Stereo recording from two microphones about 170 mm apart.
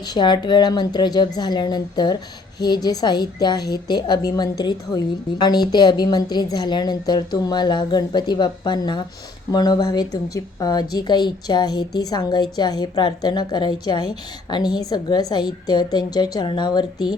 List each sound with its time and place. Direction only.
0.1 s a woman's voice: 25° left (ahead or behind)